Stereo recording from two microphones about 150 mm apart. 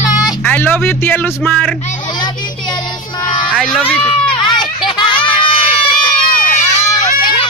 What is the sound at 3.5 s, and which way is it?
Speech, 5° left (ahead or behind).